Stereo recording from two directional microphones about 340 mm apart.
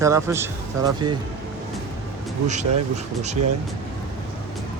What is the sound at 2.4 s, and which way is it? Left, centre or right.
Speech, right.